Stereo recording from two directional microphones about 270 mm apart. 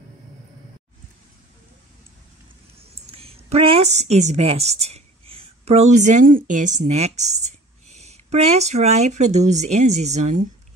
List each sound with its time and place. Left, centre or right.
2.8 s a woman's voice: right